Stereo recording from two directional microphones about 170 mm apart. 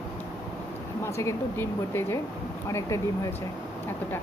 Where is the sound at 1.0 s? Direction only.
15° left (ahead or behind).